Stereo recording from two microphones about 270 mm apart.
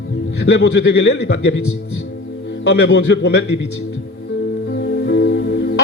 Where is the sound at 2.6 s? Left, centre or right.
Left.